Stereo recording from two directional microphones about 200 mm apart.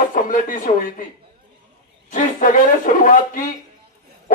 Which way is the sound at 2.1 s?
40° left (ahead or behind).